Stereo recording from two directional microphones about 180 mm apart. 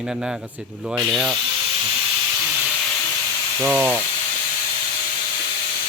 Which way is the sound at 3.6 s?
5° right (ahead or behind).